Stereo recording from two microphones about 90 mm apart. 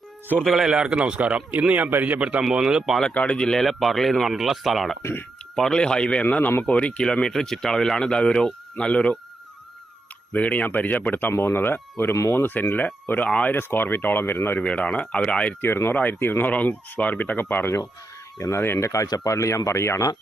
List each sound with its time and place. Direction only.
0.3 s a man's voice: centre (ahead or behind)
3.0 s speech: 15° left (ahead or behind)
10.3 s speech: 15° left (ahead or behind)
14.6 s speech: 15° left (ahead or behind)
15.6 s speech: 25° left (ahead or behind)